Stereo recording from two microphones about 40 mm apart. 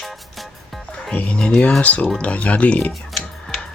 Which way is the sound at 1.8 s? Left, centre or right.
Left.